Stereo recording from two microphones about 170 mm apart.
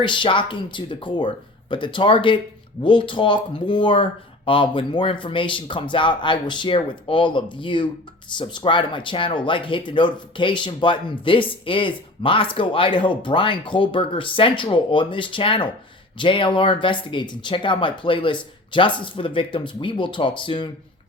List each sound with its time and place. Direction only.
0.0 s speech: 30° left (ahead or behind)